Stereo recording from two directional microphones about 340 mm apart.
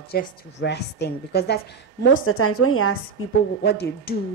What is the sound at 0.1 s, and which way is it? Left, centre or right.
A woman's voice, left.